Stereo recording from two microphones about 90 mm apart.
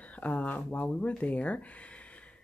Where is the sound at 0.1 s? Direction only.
15° left (ahead or behind).